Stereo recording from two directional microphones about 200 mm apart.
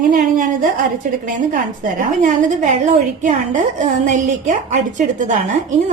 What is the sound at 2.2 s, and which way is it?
A woman's voice, 40° right (ahead or behind).